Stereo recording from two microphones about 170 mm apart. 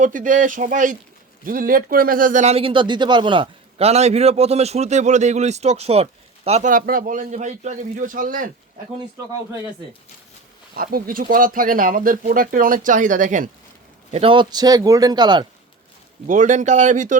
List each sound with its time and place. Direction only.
0.0 s speech: 50° right (ahead or behind)
10.8 s speech: 60° right (ahead or behind)
14.1 s a man's voice: 35° right (ahead or behind)
16.2 s speech: 45° right (ahead or behind)